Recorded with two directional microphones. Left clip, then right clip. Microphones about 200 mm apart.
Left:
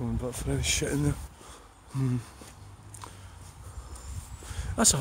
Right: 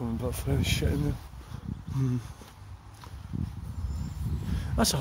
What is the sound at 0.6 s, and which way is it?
Speech, 5° left (ahead or behind).